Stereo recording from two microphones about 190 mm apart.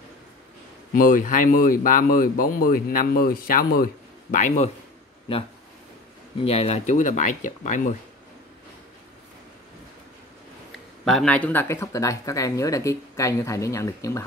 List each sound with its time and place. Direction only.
0.9 s speech: 45° left (ahead or behind)
6.4 s speech: 30° left (ahead or behind)
11.1 s speech: 5° left (ahead or behind)